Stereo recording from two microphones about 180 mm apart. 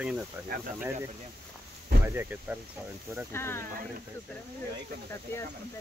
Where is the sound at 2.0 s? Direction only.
10° right (ahead or behind).